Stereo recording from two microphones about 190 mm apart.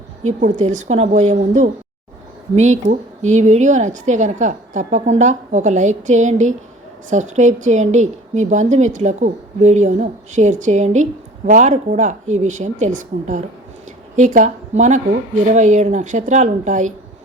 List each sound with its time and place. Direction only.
0.2 s speech: 35° right (ahead or behind)